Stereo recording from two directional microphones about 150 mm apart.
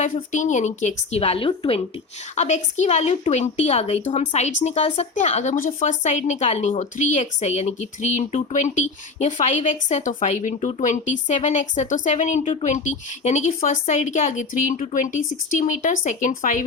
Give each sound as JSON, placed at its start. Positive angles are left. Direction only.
{"t": 0.0, "sound": "a woman's voice", "side_deg": 55}
{"t": 2.3, "sound": "a woman's voice", "side_deg": 50}